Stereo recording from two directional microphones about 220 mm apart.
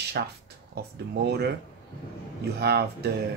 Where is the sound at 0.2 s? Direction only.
45° right (ahead or behind).